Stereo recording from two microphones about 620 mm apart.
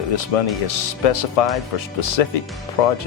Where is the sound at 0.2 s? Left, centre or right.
Left.